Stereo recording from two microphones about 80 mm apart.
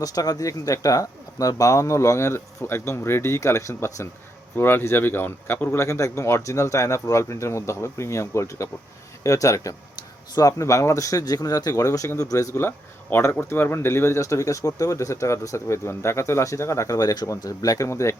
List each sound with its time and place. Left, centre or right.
0.0 s speech: left
9.9 s a sound: left
10.6 s speech: left